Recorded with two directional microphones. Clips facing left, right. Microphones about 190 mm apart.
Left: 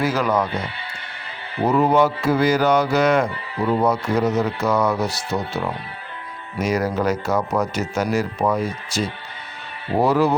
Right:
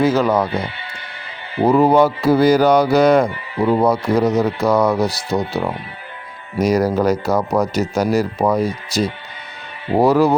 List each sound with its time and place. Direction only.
0.0 s speech: 25° right (ahead or behind)
1.6 s speech: 35° right (ahead or behind)